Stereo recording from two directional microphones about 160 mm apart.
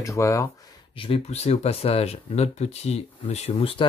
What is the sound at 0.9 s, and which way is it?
Speech, 35° left (ahead or behind).